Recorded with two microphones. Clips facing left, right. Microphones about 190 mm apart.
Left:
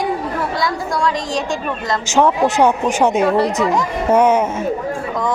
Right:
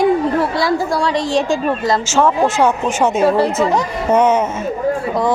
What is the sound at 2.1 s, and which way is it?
Speech, 20° left (ahead or behind).